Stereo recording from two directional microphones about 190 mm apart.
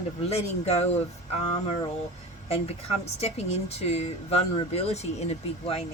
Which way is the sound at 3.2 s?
35° left (ahead or behind).